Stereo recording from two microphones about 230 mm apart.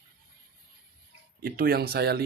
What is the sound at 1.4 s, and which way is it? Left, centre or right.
Speech, right.